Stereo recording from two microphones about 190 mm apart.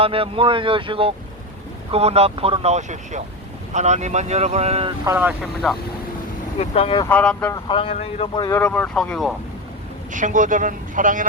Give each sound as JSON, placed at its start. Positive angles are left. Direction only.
{"t": 0.0, "sound": "speech", "side_deg": -30}
{"t": 5.0, "sound": "speech", "side_deg": -10}
{"t": 6.6, "sound": "speech", "side_deg": 30}
{"t": 7.0, "sound": "speech", "side_deg": 5}
{"t": 7.5, "sound": "speech", "side_deg": 25}
{"t": 8.4, "sound": "speech", "side_deg": 10}
{"t": 10.1, "sound": "speech", "side_deg": -40}